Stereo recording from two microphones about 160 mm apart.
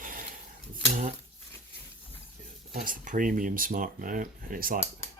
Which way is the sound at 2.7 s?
60° right (ahead or behind).